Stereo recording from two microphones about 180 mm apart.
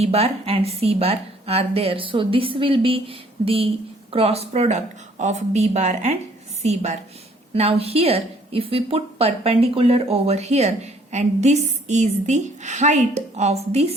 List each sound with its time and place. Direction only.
0.0 s a woman's voice: 35° right (ahead or behind)